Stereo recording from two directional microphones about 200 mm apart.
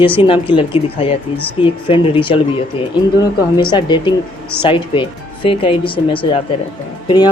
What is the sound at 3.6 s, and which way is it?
Speech, 20° left (ahead or behind).